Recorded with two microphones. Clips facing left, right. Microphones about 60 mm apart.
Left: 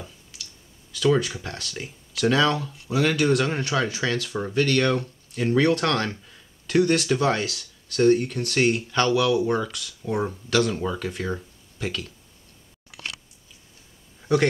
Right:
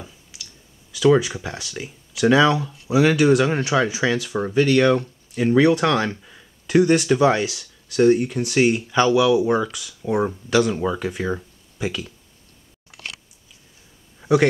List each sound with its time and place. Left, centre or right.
0.0 s clicking: centre
0.9 s speech: centre
14.2 s a man's voice: centre